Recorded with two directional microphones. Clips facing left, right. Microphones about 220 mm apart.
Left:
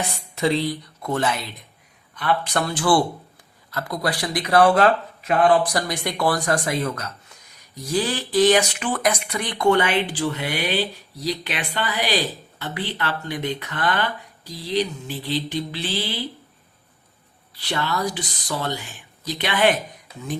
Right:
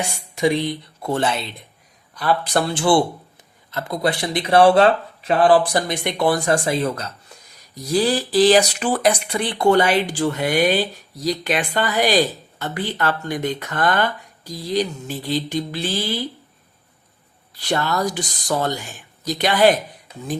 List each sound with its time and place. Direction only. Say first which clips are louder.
0.3 s speech: right 2 dB; 15° right (ahead or behind); by 16.2 s 45° right (ahead or behind)
17.5 s speech: right 4 dB; 45° right (ahead or behind)